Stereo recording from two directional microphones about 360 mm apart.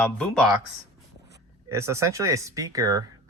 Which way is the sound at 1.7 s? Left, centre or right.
Centre.